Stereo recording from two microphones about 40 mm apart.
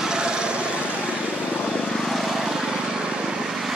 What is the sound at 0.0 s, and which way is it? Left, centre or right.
Vehicle, centre.